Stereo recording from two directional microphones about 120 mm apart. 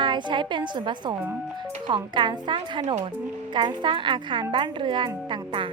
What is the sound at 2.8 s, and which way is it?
Speech, 60° right (ahead or behind).